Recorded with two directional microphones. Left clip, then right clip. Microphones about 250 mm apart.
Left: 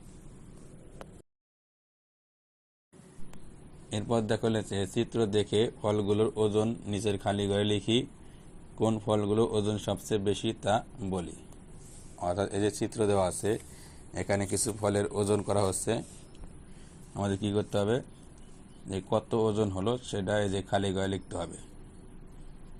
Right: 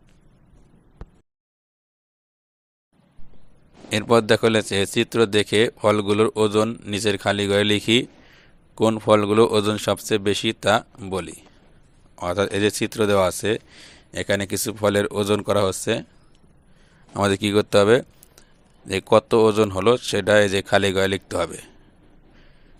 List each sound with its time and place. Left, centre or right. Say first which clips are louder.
3.8 s speech: right 13 dB; right
7.8 s a man's voice: right 10 dB; right
8.8 s speech: right 11 dB; right
12.5 s speech: right 9 dB; right
14.1 s speech: right 8 dB; right
17.2 s speech: right 12 dB; right